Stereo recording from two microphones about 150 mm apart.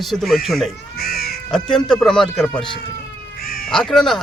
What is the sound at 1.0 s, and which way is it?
Cat, 90° left.